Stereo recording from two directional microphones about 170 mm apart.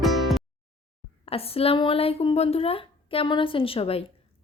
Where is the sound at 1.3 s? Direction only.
35° left (ahead or behind).